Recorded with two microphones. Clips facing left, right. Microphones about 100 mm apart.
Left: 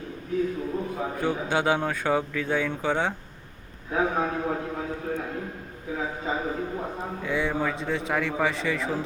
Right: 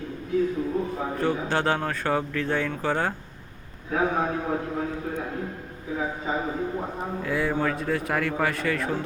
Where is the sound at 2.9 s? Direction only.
Centre (ahead or behind).